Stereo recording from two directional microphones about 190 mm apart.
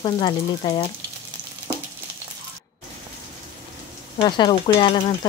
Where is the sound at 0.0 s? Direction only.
25° left (ahead or behind).